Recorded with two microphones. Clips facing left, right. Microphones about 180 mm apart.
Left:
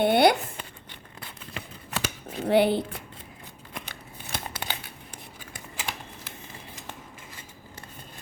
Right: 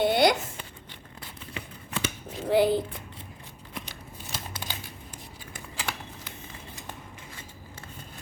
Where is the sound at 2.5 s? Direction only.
70° left (ahead or behind).